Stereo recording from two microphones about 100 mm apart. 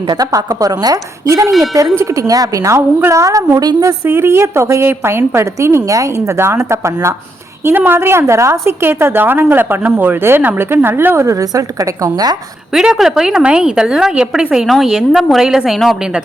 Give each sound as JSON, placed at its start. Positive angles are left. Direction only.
{"t": 0.1, "sound": "a woman's voice", "side_deg": -40}
{"t": 1.5, "sound": "a woman's voice", "side_deg": 0}
{"t": 2.0, "sound": "a woman's voice", "side_deg": -35}
{"t": 4.0, "sound": "a woman's voice", "side_deg": -25}
{"t": 12.7, "sound": "a woman's voice", "side_deg": -5}